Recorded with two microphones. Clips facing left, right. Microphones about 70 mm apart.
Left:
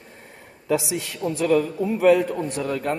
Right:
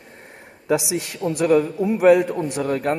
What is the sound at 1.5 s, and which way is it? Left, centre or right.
Speech, right.